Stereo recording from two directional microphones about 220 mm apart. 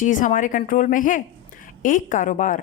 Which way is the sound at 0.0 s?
35° left (ahead or behind).